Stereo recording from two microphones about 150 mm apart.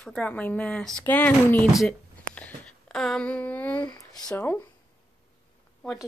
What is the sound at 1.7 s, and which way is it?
Speech, centre (ahead or behind).